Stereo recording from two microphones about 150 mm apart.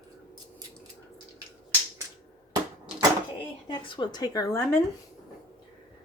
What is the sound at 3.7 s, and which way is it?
Speech, 30° left (ahead or behind).